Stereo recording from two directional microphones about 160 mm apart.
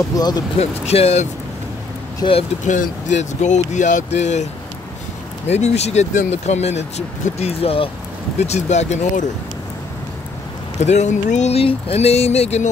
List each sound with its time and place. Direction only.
0.1 s speech: 25° left (ahead or behind)
0.6 s speech: 40° left (ahead or behind)
2.6 s speech: 50° left (ahead or behind)
5.5 s speech: 40° left (ahead or behind)
10.8 s speech: 45° left (ahead or behind)